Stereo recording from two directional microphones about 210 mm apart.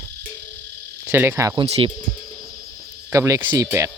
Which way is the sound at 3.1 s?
15° right (ahead or behind).